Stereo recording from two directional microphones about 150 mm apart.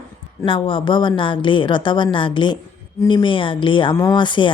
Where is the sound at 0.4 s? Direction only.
35° left (ahead or behind).